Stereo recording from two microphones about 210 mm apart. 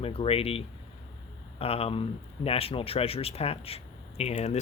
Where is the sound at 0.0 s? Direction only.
25° left (ahead or behind).